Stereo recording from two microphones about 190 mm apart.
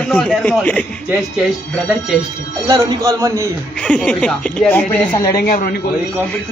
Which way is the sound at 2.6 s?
15° right (ahead or behind).